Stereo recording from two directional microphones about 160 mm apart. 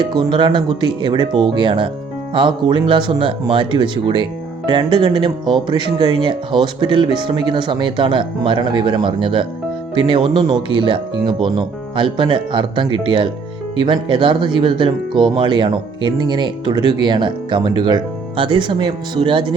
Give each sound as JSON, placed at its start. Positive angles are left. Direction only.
{"t": 0.0, "sound": "speech", "side_deg": -25}